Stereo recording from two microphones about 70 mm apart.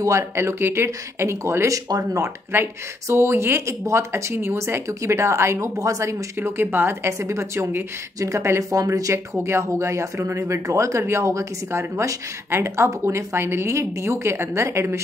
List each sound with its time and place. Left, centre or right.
0.0 s speech: right
6.6 s speech: right